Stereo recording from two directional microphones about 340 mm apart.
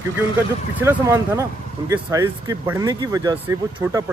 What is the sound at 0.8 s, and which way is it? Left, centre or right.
Speech, centre.